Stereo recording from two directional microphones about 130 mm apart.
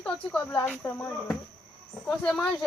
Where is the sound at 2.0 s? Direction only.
5° left (ahead or behind).